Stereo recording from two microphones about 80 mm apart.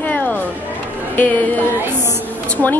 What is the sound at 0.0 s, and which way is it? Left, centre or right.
Music, left.